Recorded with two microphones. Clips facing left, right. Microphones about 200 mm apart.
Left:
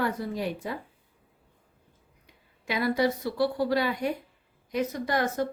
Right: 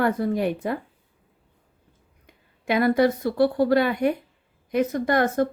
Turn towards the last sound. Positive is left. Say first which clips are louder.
# right 6 dB
turn(degrees=-55)  # may be behind; listen again after turning